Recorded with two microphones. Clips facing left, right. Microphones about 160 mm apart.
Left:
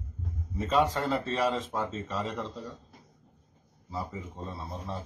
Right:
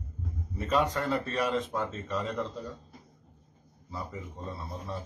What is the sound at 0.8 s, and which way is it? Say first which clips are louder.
Speech: left 1 dB; centre (ahead or behind).